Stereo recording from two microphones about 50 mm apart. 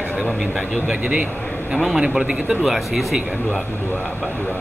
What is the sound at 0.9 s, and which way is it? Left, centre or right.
A man's voice, right.